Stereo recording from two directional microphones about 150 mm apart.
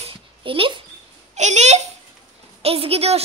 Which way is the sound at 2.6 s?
40° right (ahead or behind).